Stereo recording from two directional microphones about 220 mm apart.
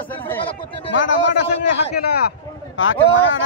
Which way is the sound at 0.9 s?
60° left (ahead or behind).